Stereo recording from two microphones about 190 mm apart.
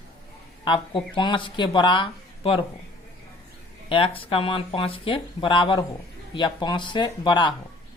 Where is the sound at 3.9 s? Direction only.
30° left (ahead or behind).